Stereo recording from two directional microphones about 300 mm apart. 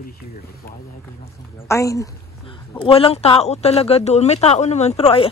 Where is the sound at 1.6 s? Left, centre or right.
Centre.